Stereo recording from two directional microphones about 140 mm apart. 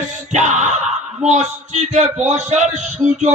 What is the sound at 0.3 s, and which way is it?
Music, 60° right (ahead or behind).